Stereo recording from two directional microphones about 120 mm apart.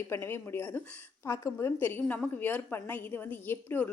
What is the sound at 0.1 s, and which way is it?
A woman's voice, 20° left (ahead or behind).